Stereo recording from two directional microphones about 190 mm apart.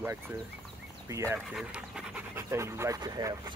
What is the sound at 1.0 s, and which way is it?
Speech, 15° right (ahead or behind).